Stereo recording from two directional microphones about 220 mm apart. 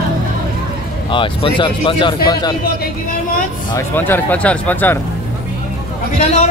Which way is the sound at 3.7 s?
10° left (ahead or behind).